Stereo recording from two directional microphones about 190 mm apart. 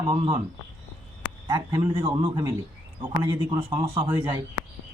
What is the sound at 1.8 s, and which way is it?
A man's voice, 25° right (ahead or behind).